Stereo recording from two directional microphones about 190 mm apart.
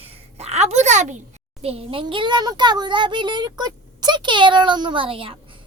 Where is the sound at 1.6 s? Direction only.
30° right (ahead or behind).